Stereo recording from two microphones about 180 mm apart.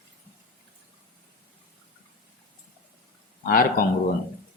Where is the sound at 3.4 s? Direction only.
50° left (ahead or behind).